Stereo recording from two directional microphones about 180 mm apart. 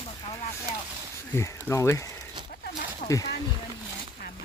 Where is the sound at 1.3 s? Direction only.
15° left (ahead or behind).